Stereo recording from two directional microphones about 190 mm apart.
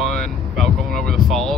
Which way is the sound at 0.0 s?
Centre (ahead or behind).